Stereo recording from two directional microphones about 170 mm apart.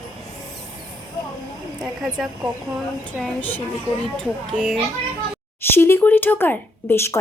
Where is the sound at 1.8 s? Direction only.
Centre (ahead or behind).